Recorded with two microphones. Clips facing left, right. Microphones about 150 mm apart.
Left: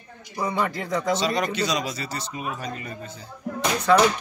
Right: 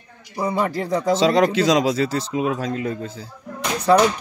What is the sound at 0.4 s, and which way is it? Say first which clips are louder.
Speech: right 4 dB; 30° right (ahead or behind).